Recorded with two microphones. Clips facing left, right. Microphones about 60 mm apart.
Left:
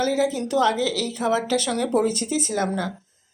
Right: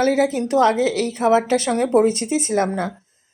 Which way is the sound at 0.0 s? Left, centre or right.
Right.